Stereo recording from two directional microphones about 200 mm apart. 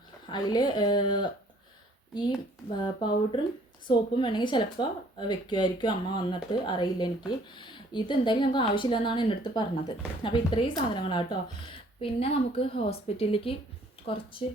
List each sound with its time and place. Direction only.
0.3 s speech: 20° left (ahead or behind)
2.8 s speech: 25° left (ahead or behind)